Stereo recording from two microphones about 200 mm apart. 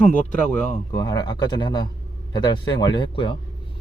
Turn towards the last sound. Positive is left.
turn(degrees=25)  # may be behind; listen again after turning